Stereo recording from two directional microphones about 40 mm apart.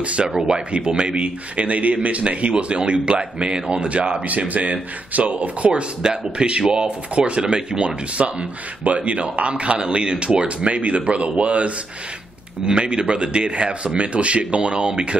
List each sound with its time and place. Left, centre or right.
0.0 s speech: right
4.3 s speech: right
10.7 s speech: right